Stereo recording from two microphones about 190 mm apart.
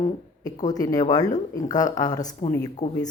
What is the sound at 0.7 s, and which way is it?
Speech, 20° left (ahead or behind).